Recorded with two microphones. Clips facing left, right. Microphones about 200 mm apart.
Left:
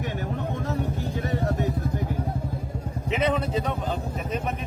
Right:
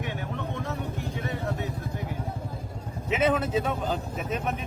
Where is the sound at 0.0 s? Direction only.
40° left (ahead or behind).